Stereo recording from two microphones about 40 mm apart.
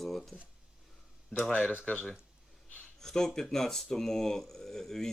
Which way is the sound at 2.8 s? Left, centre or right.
Centre.